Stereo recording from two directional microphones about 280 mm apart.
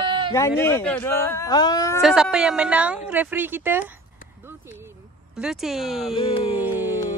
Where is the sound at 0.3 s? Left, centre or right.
Centre.